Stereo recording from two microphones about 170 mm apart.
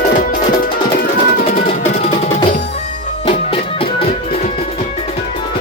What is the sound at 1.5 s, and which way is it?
Music, 60° left (ahead or behind).